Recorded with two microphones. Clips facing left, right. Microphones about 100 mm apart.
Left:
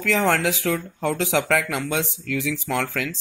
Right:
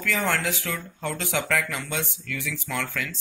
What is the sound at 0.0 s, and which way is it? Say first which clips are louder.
Speech: left 5 dB; 90° left.